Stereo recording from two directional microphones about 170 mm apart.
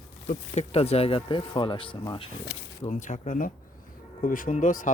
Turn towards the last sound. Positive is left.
turn(degrees=50)  # may be behind; listen again after turning